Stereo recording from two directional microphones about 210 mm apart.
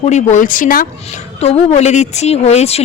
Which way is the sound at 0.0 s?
35° left (ahead or behind).